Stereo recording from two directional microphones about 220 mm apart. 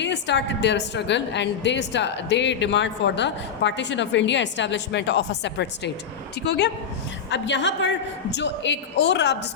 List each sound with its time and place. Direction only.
0.0 s a woman's voice: 55° left (ahead or behind)
7.3 s a woman's voice: 55° left (ahead or behind)